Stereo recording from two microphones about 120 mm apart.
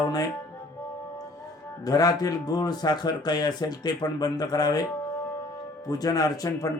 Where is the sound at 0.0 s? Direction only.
35° left (ahead or behind).